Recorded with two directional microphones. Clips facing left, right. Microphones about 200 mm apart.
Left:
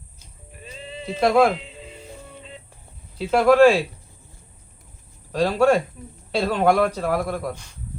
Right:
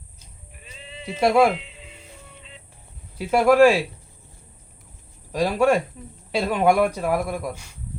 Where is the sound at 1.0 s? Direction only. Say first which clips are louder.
Even; 10° right (ahead or behind).